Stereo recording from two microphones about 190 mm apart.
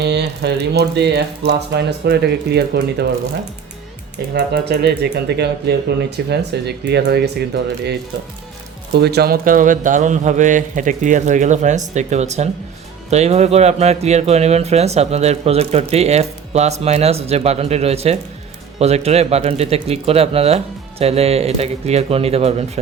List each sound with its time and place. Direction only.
0.0 s speech: 60° right (ahead or behind)
4.4 s speech: 60° right (ahead or behind)
9.0 s speech: 60° right (ahead or behind); by 22.8 s 35° right (ahead or behind)